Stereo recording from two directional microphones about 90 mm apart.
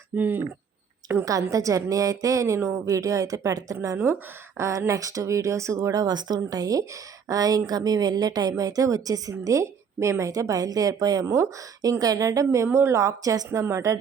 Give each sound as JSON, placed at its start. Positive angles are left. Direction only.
{"t": 0.2, "sound": "speech", "side_deg": -20}
{"t": 1.2, "sound": "a woman's voice", "side_deg": -40}
{"t": 3.8, "sound": "a woman's voice", "side_deg": -25}